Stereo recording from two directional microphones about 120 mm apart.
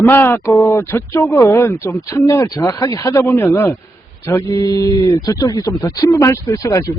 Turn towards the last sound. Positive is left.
turn(degrees=25)  # may be behind; listen again after turning